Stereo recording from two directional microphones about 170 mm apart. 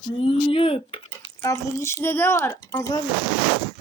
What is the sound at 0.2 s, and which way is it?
Speech, 35° left (ahead or behind).